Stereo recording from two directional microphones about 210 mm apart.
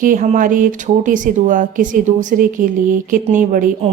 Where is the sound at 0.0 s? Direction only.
40° right (ahead or behind).